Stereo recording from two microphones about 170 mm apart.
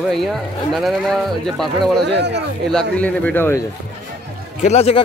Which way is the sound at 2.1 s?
85° right.